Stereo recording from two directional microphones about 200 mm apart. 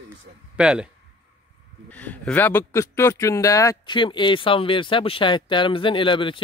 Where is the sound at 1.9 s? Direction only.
10° left (ahead or behind).